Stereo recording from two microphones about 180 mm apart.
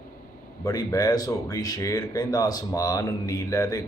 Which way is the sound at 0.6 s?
20° left (ahead or behind).